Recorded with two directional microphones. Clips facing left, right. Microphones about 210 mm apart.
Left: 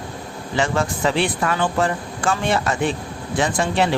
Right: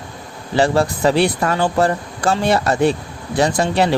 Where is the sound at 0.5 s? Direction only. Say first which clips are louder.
Right 5 dB; 35° right (ahead or behind).